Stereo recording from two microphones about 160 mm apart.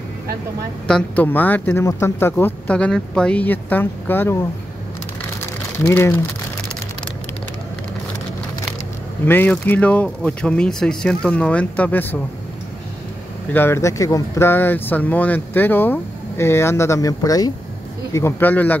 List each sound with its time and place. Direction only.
0.8 s speech: 5° left (ahead or behind)
5.4 s a sound: 15° left (ahead or behind)
9.2 s speech: 10° left (ahead or behind)
13.5 s speech: 15° left (ahead or behind)